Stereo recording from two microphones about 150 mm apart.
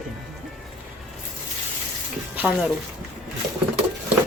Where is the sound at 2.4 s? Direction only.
5° right (ahead or behind).